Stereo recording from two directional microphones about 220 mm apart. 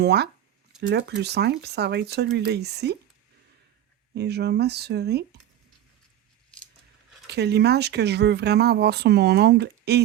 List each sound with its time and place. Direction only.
0.0 s speech: 50° right (ahead or behind)
4.1 s speech: 50° right (ahead or behind)
7.3 s speech: 50° right (ahead or behind)